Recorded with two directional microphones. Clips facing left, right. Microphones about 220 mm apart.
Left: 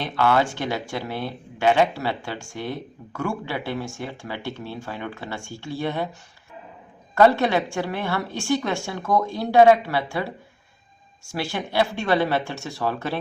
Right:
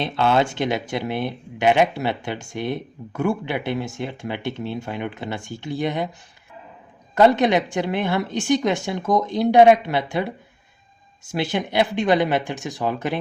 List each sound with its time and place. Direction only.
0.0 s speech: 25° right (ahead or behind)
7.2 s speech: 20° right (ahead or behind)